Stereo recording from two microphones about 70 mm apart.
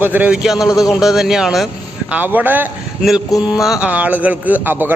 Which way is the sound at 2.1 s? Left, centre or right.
Right.